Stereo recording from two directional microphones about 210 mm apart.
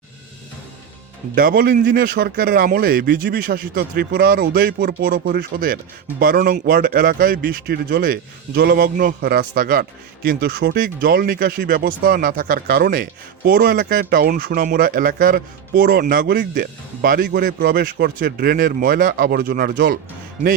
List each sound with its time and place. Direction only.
1.4 s speech: 45° right (ahead or behind)